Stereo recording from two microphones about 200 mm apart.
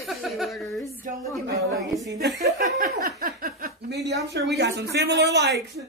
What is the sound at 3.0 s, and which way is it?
Chuckle, 50° right (ahead or behind).